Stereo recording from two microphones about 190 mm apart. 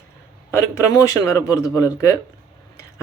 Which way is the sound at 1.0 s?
15° left (ahead or behind).